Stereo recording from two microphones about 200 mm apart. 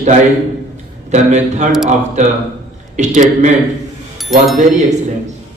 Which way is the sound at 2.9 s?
35° right (ahead or behind).